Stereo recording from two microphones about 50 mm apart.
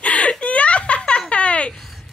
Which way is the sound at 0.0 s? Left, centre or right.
Left.